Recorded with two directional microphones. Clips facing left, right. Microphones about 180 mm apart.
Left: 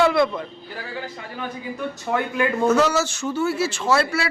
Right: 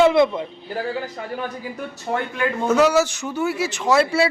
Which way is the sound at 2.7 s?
10° right (ahead or behind).